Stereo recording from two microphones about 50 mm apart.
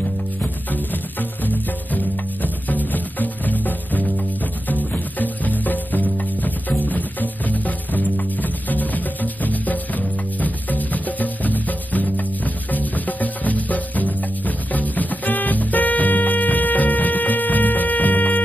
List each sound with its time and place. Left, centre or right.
2.4 s music: left